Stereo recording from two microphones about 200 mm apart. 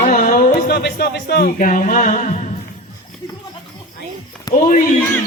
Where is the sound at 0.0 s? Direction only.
35° left (ahead or behind).